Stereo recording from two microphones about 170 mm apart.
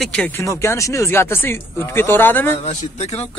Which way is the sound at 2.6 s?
40° left (ahead or behind).